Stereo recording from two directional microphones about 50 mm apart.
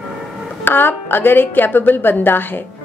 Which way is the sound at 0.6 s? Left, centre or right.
Left.